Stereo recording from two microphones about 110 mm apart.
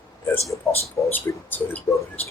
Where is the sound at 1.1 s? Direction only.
15° left (ahead or behind).